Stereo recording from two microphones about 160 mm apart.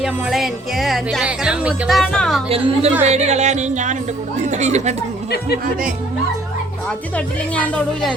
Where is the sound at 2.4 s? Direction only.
40° right (ahead or behind).